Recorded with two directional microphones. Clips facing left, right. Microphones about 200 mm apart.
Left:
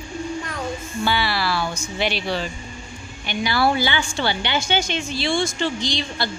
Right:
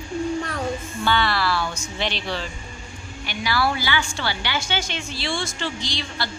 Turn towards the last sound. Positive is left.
turn(degrees=20)  # may be behind; listen again after turning